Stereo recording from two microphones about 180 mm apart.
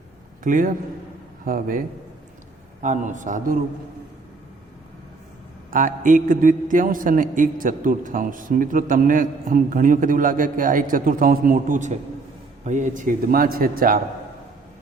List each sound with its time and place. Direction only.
0.4 s a man's voice: 45° right (ahead or behind)
2.8 s a man's voice: 45° right (ahead or behind)
5.7 s a man's voice: 45° right (ahead or behind)